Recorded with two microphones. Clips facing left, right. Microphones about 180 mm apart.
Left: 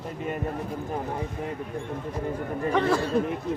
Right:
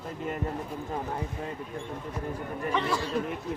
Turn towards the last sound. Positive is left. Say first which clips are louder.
# left 6 dB
turn(degrees=55)  # may be behind; listen again after turning